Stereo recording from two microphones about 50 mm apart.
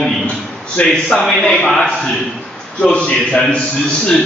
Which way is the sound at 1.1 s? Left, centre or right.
Centre.